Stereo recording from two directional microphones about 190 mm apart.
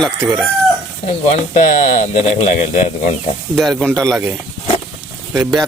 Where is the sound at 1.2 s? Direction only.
40° left (ahead or behind).